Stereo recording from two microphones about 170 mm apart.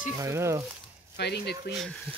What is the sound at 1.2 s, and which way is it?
Speech, 75° left (ahead or behind).